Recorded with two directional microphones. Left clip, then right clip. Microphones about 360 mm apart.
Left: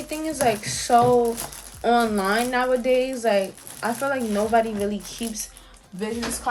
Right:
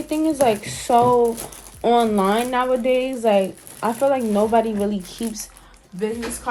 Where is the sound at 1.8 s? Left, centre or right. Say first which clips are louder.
Right 3 dB; right.